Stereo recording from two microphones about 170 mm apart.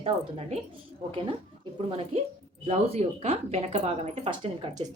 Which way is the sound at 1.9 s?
35° right (ahead or behind).